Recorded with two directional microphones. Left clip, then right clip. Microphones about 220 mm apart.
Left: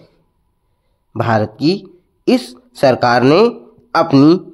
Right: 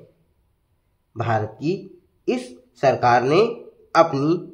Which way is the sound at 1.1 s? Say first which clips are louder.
Left 8 dB; 40° left (ahead or behind).